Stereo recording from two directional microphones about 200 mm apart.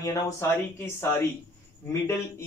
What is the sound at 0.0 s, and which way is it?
Speech, 15° left (ahead or behind).